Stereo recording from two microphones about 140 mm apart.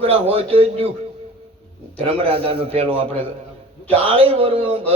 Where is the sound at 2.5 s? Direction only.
40° right (ahead or behind).